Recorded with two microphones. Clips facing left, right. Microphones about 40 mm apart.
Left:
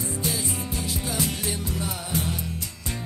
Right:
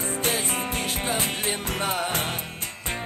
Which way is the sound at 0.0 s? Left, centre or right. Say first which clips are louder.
Right 3 dB; right.